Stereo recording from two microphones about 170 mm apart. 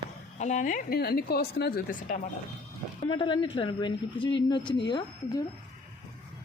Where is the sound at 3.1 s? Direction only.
30° left (ahead or behind).